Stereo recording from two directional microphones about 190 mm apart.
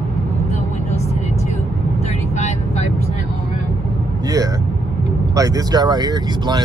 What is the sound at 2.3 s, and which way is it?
Vehicle, 35° left (ahead or behind).